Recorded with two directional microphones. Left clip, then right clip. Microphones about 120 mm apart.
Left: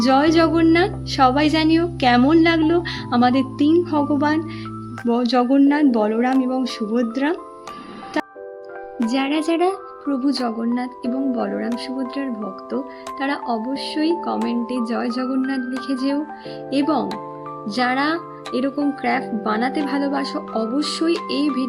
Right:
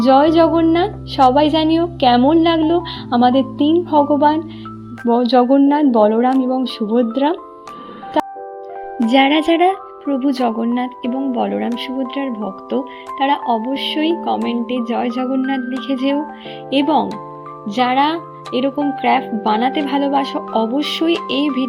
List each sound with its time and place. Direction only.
0.0 s speech: 20° right (ahead or behind)
9.0 s speech: 35° right (ahead or behind)
9.6 s speech: 15° right (ahead or behind)
10.4 s speech: 25° right (ahead or behind)